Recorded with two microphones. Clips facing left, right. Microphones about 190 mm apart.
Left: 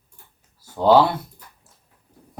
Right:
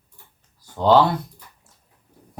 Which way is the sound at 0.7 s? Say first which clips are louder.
Left 1 dB; 5° left (ahead or behind).